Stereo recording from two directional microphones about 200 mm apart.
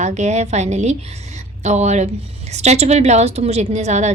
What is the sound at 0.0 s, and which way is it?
A woman's voice, 35° right (ahead or behind).